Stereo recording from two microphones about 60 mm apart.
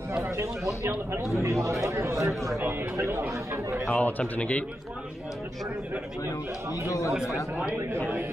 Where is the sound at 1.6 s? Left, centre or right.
Right.